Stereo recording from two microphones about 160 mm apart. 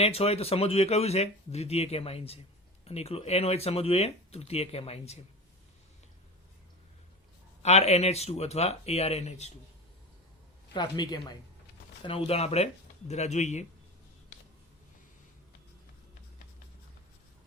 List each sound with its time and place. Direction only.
0.0 s speech: 40° left (ahead or behind)
7.6 s speech: 45° left (ahead or behind)
10.8 s a woman's voice: 25° left (ahead or behind)
12.0 s speech: 35° left (ahead or behind)